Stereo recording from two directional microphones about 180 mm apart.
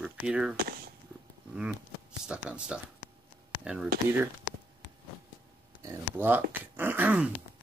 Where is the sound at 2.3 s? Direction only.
5° right (ahead or behind).